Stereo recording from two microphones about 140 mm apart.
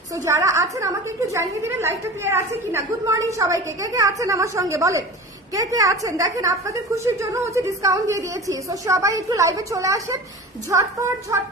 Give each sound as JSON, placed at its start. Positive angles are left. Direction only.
{"t": 0.1, "sound": "a woman's voice", "side_deg": -20}